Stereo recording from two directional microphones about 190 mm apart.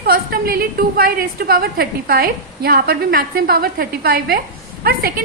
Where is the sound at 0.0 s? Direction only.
55° right (ahead or behind).